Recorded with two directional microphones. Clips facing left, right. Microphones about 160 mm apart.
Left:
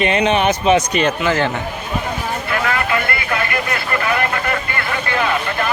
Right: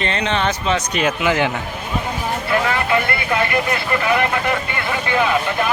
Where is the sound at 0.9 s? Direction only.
5° right (ahead or behind).